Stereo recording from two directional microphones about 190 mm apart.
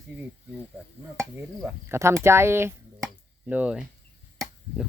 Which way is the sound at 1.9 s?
15° right (ahead or behind).